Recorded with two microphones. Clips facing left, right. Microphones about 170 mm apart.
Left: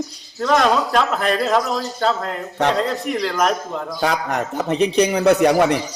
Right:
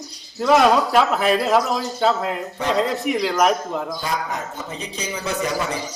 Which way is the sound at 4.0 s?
70° left (ahead or behind).